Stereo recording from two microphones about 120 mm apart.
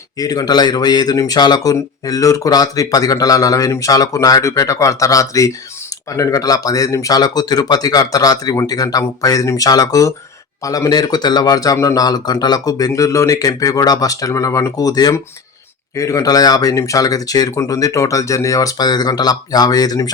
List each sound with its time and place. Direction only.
0.2 s speech: 30° left (ahead or behind)